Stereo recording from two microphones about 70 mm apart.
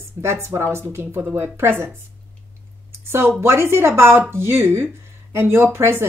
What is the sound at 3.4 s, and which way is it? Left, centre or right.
Speech, right.